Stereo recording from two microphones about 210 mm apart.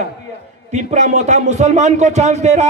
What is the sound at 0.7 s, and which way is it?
A man's voice, 35° right (ahead or behind).